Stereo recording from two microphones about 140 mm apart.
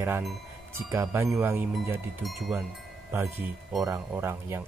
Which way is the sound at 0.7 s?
15° right (ahead or behind).